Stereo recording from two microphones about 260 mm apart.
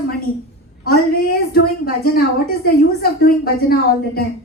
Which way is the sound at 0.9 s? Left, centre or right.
Left.